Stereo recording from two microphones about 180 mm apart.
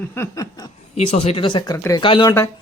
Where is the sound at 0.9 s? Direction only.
35° left (ahead or behind).